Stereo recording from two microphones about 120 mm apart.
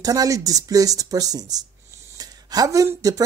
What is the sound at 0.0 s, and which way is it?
Speech, 30° right (ahead or behind).